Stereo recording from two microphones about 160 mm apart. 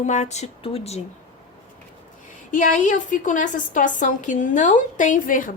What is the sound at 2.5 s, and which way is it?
A woman's voice, 55° left (ahead or behind).